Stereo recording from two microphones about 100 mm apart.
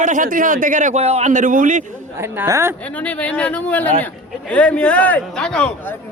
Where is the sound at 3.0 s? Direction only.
10° left (ahead or behind).